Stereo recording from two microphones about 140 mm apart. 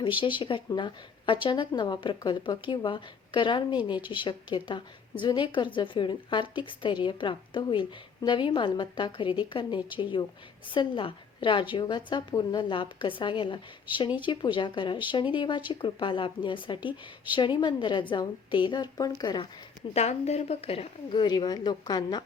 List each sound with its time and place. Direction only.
0.0 s a woman's voice: 35° left (ahead or behind)
19.9 s a woman's voice: 50° left (ahead or behind); by 22.2 s 30° left (ahead or behind)